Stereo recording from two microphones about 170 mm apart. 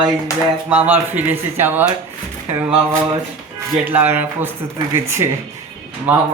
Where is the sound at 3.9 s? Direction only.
10° right (ahead or behind).